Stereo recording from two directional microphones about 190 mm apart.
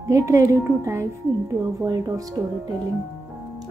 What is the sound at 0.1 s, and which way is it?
A woman's voice, 15° right (ahead or behind).